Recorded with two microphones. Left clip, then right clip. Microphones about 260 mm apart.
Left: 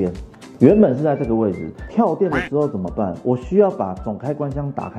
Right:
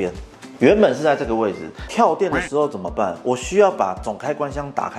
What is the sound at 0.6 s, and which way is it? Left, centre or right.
Speech, centre.